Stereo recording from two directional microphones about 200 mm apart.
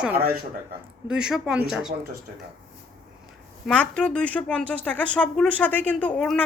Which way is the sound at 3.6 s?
5° left (ahead or behind).